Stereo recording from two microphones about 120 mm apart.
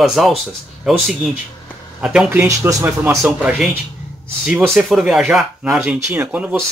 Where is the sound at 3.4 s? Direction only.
10° right (ahead or behind).